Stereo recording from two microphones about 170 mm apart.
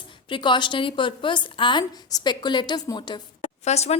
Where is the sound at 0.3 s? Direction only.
30° left (ahead or behind).